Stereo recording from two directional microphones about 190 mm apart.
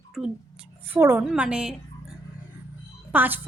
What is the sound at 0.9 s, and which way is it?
A woman's voice, 10° right (ahead or behind).